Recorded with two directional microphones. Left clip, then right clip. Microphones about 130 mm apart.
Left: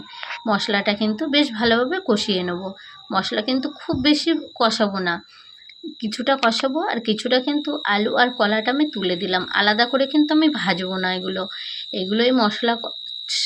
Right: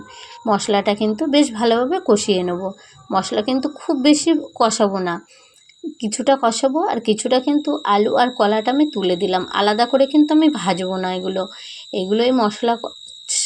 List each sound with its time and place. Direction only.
0.4 s speech: 25° right (ahead or behind)